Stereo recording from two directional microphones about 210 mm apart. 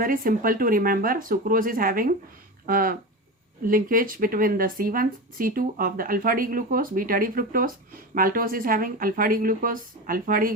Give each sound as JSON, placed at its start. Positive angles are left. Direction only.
{"t": 0.0, "sound": "speech", "side_deg": -40}